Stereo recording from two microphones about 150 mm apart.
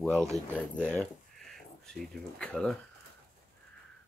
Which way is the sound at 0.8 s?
5° left (ahead or behind).